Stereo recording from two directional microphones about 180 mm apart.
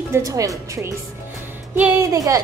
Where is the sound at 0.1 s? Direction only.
20° right (ahead or behind).